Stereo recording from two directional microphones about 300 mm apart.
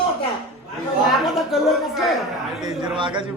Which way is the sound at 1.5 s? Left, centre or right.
Centre.